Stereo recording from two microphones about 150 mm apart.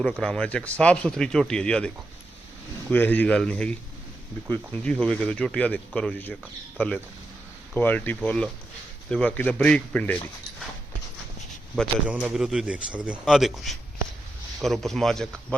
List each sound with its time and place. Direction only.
0.0 s speech: 5° left (ahead or behind)
2.9 s speech: 10° left (ahead or behind)
12.0 s speech: 5° right (ahead or behind)